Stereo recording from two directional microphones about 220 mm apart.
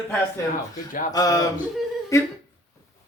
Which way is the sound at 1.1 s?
15° left (ahead or behind).